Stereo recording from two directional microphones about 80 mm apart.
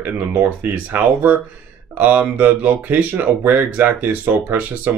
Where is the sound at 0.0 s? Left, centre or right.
Right.